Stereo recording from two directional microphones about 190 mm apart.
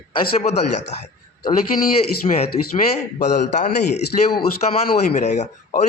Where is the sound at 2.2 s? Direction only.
35° left (ahead or behind).